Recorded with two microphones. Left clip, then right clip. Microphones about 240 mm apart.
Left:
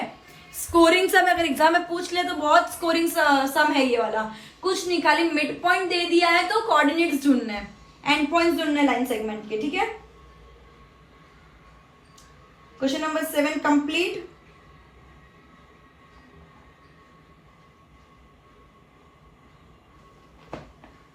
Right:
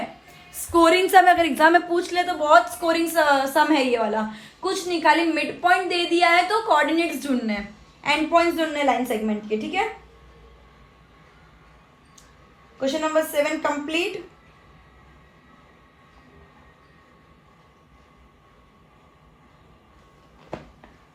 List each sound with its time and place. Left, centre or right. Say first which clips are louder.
0.7 s a woman's voice: right 2 dB; right
12.8 s a woman's voice: right 3 dB; right